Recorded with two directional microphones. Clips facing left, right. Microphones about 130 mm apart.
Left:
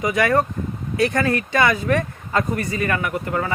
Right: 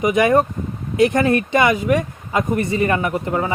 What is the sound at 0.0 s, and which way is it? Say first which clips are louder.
A man's voice: right 4 dB; 20° right (ahead or behind).